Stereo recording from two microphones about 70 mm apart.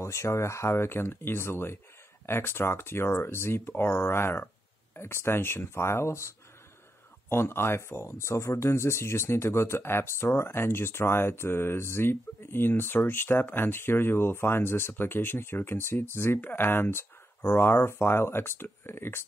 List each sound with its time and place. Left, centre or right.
0.0 s speech: left